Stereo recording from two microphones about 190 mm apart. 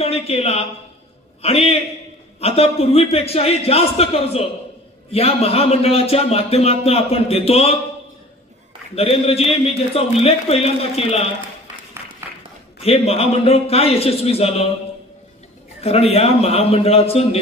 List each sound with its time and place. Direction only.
0.0 s a man's voice: 30° left (ahead or behind)
8.9 s a man's voice: 30° left (ahead or behind)
12.8 s a man's voice: 30° left (ahead or behind)
15.8 s a man's voice: 30° left (ahead or behind)